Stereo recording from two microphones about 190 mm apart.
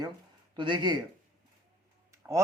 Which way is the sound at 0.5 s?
25° right (ahead or behind).